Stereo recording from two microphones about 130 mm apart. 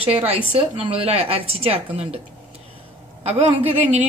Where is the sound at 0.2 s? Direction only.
45° right (ahead or behind).